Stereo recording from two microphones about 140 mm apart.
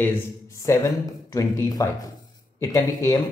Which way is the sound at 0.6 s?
25° left (ahead or behind).